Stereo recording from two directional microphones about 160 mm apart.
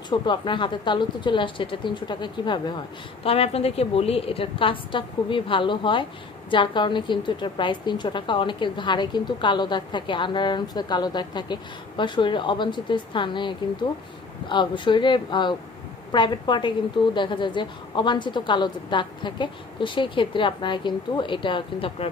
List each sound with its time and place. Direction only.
0.1 s a woman's voice: 30° left (ahead or behind)
3.3 s a woman's voice: 40° left (ahead or behind)